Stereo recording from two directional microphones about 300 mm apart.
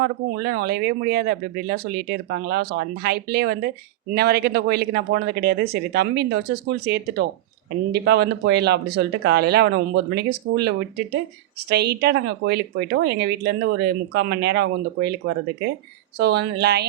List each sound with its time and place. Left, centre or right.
0.0 s speech: right
16.1 s speech: right